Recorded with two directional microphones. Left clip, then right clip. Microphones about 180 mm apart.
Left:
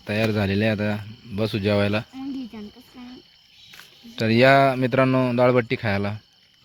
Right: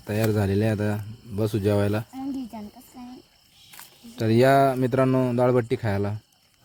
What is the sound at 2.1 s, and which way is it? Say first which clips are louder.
Cricket: even; 75° right (ahead or behind).